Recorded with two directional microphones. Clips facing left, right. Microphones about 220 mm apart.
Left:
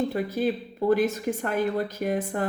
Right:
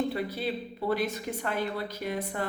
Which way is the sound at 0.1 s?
45° left (ahead or behind).